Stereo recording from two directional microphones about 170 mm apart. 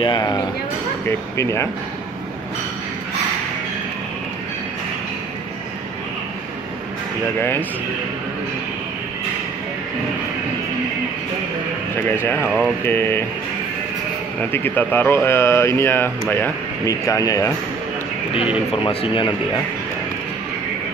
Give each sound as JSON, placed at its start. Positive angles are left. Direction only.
{"t": 0.0, "sound": "speech", "side_deg": 25}
{"t": 7.3, "sound": "speech", "side_deg": 15}
{"t": 12.2, "sound": "speech", "side_deg": 15}
{"t": 14.5, "sound": "speech", "side_deg": 10}
{"t": 18.9, "sound": "speech", "side_deg": 30}